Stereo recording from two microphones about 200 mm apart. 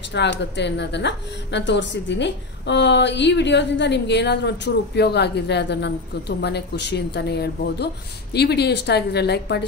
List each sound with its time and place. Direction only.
0.1 s speech: 60° left (ahead or behind)